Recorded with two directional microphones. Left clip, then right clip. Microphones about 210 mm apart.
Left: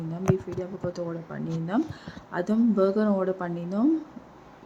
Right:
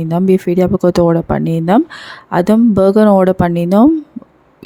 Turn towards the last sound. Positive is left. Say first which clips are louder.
# right 17 dB
turn(degrees=-50)  # may be behind; listen again after turning